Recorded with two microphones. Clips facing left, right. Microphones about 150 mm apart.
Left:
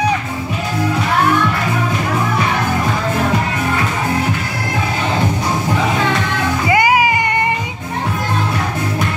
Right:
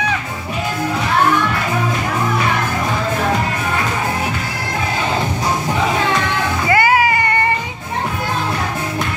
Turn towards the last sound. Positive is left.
turn(degrees=15)  # may be behind; listen again after turning